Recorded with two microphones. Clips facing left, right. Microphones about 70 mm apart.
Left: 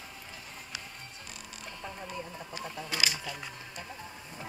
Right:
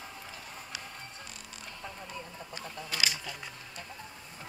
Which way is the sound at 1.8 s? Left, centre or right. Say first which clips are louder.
Left 3 dB; centre.